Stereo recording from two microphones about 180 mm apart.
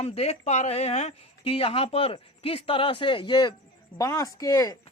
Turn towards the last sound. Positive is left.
turn(degrees=20)  # may be behind; listen again after turning